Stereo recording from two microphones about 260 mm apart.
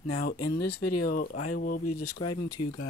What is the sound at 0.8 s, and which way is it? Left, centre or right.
Speech, left.